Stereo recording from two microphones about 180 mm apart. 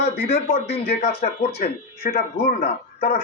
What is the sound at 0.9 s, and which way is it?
Speech, 50° left (ahead or behind).